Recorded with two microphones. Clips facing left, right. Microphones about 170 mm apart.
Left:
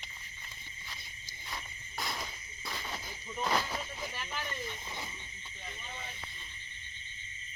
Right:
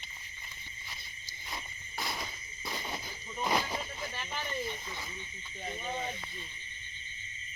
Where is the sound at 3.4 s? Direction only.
15° right (ahead or behind).